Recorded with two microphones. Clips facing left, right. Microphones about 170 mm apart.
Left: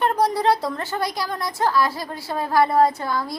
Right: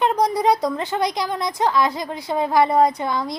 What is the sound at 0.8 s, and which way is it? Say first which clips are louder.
A woman's voice: right 3 dB; 20° right (ahead or behind).